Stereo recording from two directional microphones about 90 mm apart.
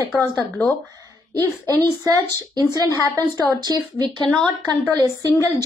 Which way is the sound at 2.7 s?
50° right (ahead or behind).